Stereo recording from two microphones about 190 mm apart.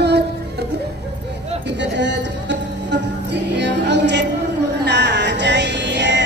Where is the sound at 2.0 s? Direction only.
70° right (ahead or behind).